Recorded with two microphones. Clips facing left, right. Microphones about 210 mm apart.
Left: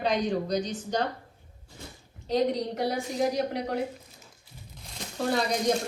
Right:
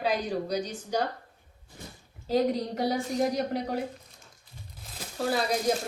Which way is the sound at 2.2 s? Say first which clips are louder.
Even; centre (ahead or behind).